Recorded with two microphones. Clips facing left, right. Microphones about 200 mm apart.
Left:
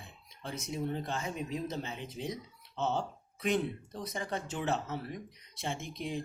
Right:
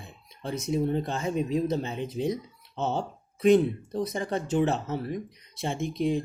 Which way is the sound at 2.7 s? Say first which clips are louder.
Right 4 dB; 45° right (ahead or behind).